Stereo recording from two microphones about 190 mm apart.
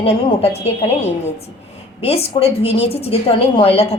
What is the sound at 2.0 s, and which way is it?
A woman's voice, 30° left (ahead or behind).